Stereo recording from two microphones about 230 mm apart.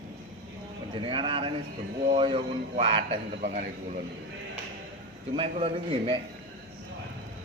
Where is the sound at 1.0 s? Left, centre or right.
Right.